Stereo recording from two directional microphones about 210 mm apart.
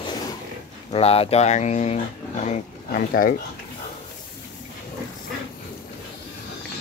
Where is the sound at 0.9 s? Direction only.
30° left (ahead or behind).